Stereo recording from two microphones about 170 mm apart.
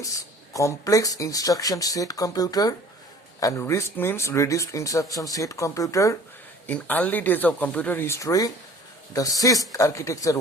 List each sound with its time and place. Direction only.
0.5 s speech: 20° left (ahead or behind)